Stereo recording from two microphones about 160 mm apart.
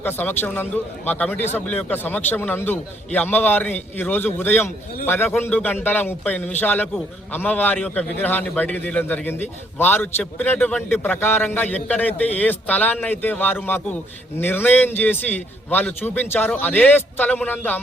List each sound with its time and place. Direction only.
0.0 s a man's voice: 10° left (ahead or behind)